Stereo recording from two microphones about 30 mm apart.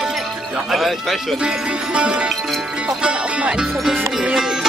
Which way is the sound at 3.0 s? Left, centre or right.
Right.